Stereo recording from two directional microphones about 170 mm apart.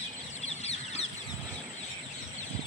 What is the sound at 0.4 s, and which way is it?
Chicken, 40° left (ahead or behind).